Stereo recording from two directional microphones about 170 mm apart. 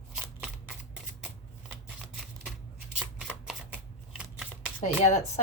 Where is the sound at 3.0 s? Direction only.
Centre (ahead or behind).